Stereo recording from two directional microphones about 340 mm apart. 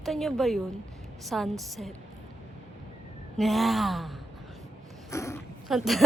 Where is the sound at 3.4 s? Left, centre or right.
Centre.